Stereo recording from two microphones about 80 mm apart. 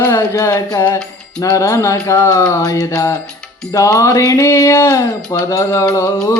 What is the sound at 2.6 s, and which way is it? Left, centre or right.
Music, left.